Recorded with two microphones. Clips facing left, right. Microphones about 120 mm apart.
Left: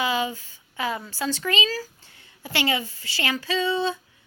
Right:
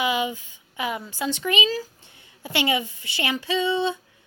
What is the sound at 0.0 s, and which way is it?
Speech, 20° right (ahead or behind).